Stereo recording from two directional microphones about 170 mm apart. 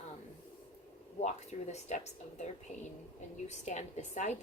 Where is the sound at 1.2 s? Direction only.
40° left (ahead or behind).